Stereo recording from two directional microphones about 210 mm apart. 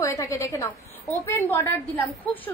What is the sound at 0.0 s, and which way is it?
A woman's voice, 15° left (ahead or behind).